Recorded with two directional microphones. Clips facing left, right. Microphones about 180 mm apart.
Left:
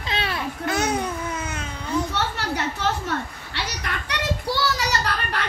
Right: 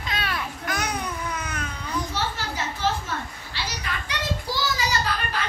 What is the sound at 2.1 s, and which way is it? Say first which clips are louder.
Children playing: left 3 dB; 70° left (ahead or behind).